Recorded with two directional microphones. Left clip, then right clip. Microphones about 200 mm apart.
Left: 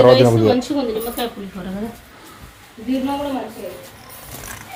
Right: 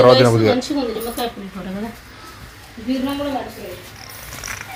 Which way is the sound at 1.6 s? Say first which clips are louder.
Even; 5° left (ahead or behind).